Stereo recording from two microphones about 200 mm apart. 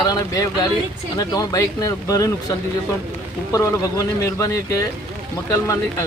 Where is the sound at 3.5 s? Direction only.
15° left (ahead or behind).